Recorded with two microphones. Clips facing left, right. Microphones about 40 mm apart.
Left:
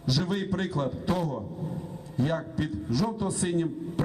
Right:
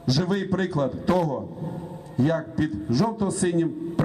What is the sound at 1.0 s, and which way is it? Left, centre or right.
Speech, right.